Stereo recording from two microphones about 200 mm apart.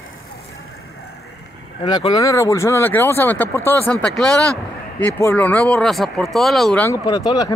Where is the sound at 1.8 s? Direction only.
30° left (ahead or behind).